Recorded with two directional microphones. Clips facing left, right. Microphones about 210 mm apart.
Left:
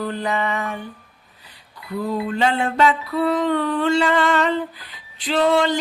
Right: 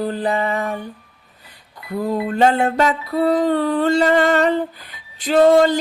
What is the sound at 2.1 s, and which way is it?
Music, 45° right (ahead or behind).